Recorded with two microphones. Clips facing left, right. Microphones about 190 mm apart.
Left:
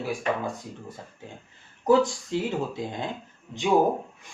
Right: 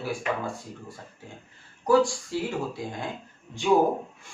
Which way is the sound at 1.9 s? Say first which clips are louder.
Left 1 dB; 20° left (ahead or behind).